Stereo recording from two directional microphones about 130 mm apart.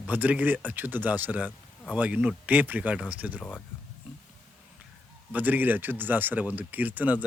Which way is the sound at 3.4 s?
Centre (ahead or behind).